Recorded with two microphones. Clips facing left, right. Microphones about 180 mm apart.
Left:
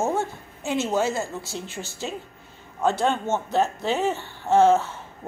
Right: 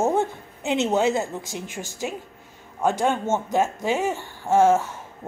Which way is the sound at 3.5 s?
10° right (ahead or behind).